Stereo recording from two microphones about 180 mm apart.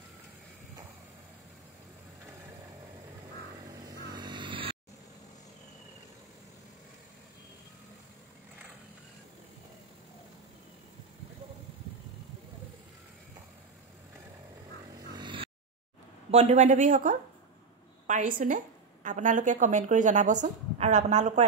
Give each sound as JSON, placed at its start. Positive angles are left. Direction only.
{"t": 3.6, "sound": "vehicle", "side_deg": -25}
{"t": 15.1, "sound": "a sound", "side_deg": -25}
{"t": 16.3, "sound": "a woman's voice", "side_deg": -40}